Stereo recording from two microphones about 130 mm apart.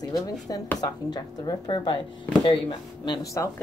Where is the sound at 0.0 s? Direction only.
30° left (ahead or behind).